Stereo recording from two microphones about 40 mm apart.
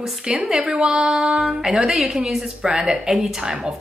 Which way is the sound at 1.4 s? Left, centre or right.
Centre.